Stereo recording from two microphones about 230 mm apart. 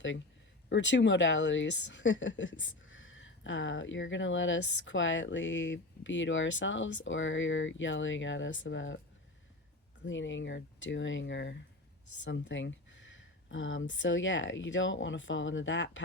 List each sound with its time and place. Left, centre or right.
0.7 s speech: left
10.1 s speech: left